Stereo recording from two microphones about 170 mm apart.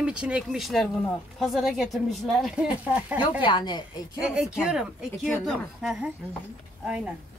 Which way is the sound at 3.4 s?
25° left (ahead or behind).